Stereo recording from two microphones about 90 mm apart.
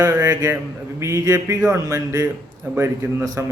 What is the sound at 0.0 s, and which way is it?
A man's voice, 30° right (ahead or behind).